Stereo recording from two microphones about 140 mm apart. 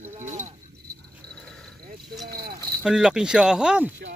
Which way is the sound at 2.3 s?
90° right.